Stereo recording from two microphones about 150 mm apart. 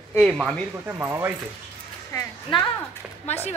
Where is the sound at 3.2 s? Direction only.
45° left (ahead or behind).